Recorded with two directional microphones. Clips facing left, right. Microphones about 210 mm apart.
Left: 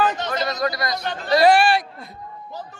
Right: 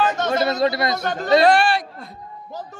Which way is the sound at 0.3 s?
25° right (ahead or behind).